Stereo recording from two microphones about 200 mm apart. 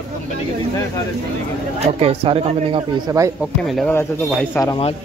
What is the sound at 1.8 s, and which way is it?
Speech, 30° right (ahead or behind).